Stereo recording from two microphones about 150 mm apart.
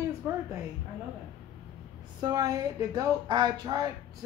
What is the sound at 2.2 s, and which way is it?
Speech, 25° right (ahead or behind).